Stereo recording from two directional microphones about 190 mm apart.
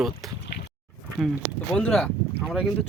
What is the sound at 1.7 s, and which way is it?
Speech, 5° left (ahead or behind).